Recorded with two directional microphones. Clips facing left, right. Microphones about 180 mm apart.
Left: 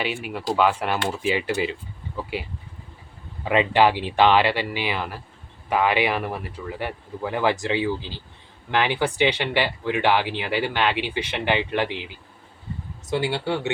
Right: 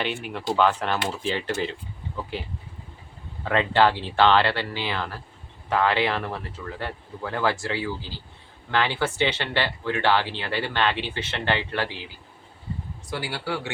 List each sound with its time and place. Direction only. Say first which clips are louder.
0.0 s speech: left 1 dB; 5° left (ahead or behind)
13.1 s speech: left 6 dB; 25° left (ahead or behind)